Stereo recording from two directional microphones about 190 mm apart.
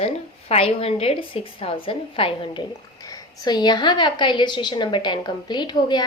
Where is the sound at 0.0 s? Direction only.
30° left (ahead or behind).